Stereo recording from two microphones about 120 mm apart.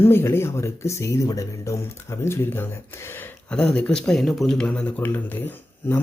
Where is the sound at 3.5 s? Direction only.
10° left (ahead or behind).